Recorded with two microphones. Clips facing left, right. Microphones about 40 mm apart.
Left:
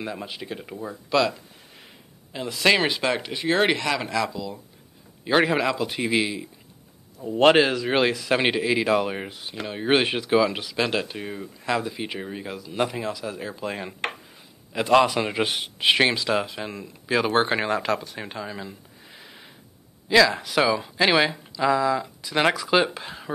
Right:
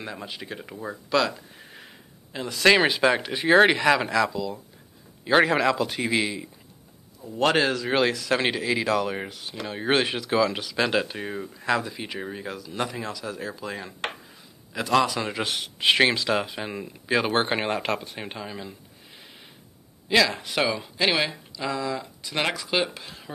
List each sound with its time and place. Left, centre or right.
0.0 s speech: centre
7.2 s speech: left
7.5 s speech: centre
11.8 s speech: centre
13.6 s a man's voice: left
15.8 s speech: centre
17.6 s speech: right
18.2 s speech: centre
20.1 s speech: centre